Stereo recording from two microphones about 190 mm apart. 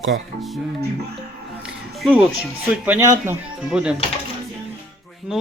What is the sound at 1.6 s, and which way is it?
Music, 5° right (ahead or behind).